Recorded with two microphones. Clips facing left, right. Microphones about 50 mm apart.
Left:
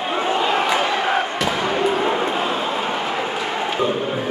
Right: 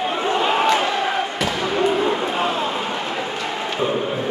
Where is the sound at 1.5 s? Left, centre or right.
Centre.